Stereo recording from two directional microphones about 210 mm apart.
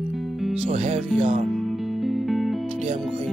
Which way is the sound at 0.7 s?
30° right (ahead or behind).